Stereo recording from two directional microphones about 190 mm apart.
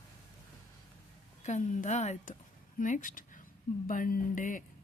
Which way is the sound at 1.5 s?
40° left (ahead or behind).